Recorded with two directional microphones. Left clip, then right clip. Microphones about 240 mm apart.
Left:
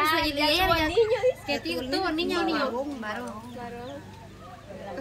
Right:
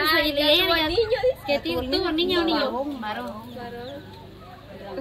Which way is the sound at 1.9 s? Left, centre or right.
Centre.